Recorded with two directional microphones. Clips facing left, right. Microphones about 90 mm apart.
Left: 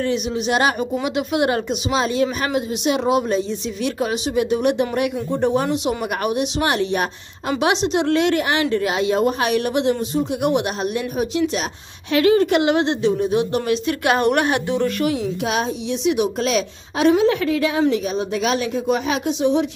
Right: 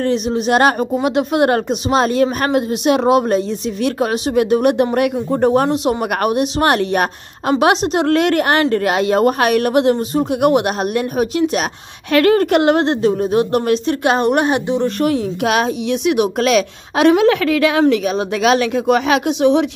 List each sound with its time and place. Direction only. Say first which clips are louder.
0.0 s speech: right 4 dB; 40° right (ahead or behind)
13.8 s a woman's voice: right 3 dB; 25° right (ahead or behind)
15.0 s speech: right 4 dB; 40° right (ahead or behind)
15.4 s a woman's voice: right 8 dB; 65° right (ahead or behind)